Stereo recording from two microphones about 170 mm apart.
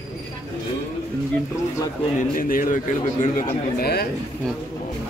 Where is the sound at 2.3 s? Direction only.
55° left (ahead or behind).